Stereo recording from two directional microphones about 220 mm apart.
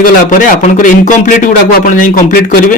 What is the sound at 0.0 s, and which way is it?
Speech, 35° left (ahead or behind).